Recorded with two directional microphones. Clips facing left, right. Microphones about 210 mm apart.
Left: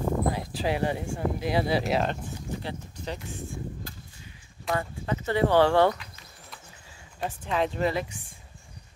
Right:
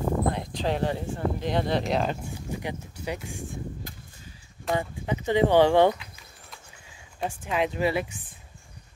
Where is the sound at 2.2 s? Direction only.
10° right (ahead or behind).